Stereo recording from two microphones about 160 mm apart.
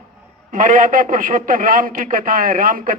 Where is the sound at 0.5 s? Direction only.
55° right (ahead or behind).